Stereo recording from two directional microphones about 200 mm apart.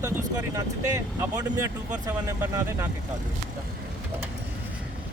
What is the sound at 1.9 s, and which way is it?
Speech, 10° right (ahead or behind).